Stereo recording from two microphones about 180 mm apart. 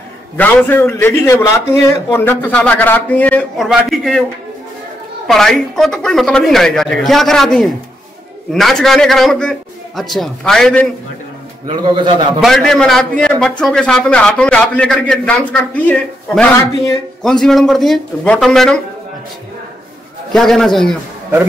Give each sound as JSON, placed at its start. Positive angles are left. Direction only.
{"t": 0.4, "sound": "a man's voice", "side_deg": 10}
{"t": 3.6, "sound": "a man's voice", "side_deg": 0}
{"t": 5.2, "sound": "a man's voice", "side_deg": 0}
{"t": 11.7, "sound": "a man's voice", "side_deg": -25}
{"t": 12.4, "sound": "a man's voice", "side_deg": 0}
{"t": 20.3, "sound": "a man's voice", "side_deg": 0}